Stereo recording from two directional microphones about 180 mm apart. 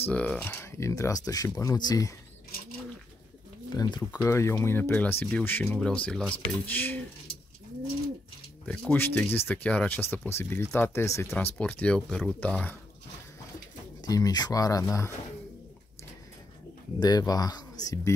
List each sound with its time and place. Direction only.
0.0 s speech: 5° left (ahead or behind)
3.7 s speech: 25° left (ahead or behind)
8.6 s speech: 10° left (ahead or behind)
14.0 s speech: 20° left (ahead or behind)
17.0 s speech: 20° left (ahead or behind)